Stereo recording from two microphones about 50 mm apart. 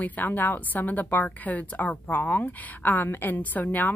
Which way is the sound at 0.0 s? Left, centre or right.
Left.